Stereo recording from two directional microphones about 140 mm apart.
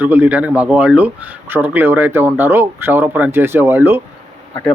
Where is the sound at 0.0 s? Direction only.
10° right (ahead or behind).